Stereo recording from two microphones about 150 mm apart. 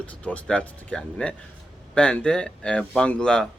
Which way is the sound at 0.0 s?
10° left (ahead or behind).